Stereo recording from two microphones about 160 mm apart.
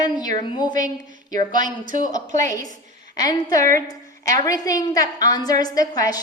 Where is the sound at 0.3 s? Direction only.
30° left (ahead or behind).